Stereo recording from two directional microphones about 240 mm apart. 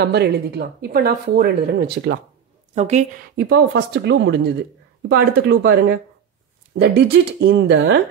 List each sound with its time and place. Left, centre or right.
0.0 s speech: right
2.7 s speech: right